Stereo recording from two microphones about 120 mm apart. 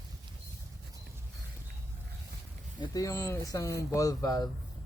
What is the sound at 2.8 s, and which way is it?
A man's voice, 30° left (ahead or behind).